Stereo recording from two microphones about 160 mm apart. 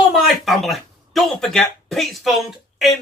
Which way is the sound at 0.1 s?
Centre (ahead or behind).